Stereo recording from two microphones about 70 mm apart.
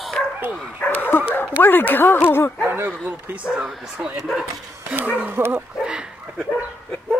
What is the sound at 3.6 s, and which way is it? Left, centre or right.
Speech, centre.